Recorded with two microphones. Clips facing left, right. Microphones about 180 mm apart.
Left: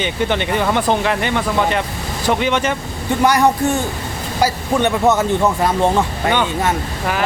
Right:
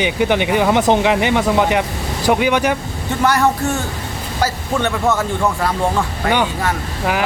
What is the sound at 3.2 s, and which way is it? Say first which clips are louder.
Speech: left 1 dB; 15° left (ahead or behind).